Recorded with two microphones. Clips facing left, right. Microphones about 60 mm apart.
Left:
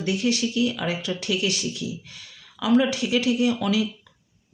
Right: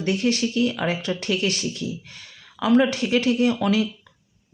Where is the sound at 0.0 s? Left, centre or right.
Right.